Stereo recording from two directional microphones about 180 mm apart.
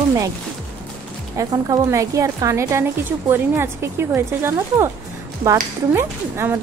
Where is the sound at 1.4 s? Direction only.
20° right (ahead or behind).